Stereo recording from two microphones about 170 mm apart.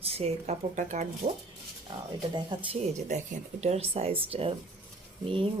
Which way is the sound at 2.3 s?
30° right (ahead or behind).